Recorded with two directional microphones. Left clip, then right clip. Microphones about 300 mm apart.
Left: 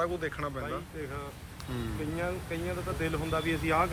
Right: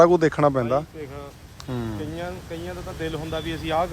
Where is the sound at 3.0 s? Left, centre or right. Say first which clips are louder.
Right 4 dB; right.